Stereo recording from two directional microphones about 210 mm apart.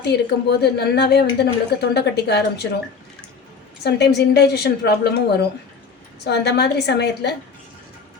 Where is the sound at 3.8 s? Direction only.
50° left (ahead or behind).